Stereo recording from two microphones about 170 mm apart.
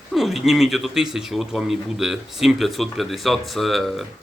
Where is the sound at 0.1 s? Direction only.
Centre (ahead or behind).